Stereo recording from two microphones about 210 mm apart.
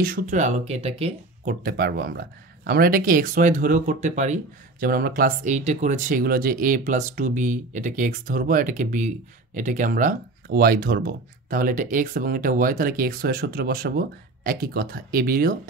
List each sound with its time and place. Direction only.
0.0 s speech: 40° right (ahead or behind)
1.5 s speech: 45° right (ahead or behind)